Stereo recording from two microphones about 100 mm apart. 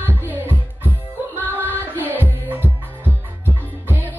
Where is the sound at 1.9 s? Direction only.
20° right (ahead or behind).